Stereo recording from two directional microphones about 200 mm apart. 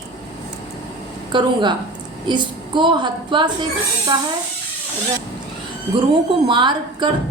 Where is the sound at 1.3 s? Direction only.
20° right (ahead or behind).